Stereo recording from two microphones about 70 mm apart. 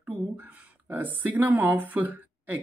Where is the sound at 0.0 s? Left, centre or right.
Right.